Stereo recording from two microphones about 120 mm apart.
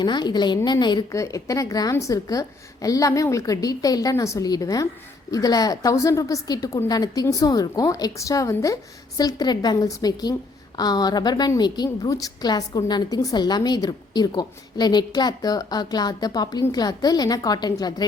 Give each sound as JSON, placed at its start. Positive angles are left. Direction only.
{"t": 0.0, "sound": "a woman's voice", "side_deg": 40}
{"t": 1.1, "sound": "a woman's voice", "side_deg": 25}